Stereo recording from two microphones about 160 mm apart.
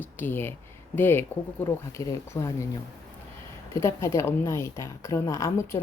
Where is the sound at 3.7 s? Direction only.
15° left (ahead or behind).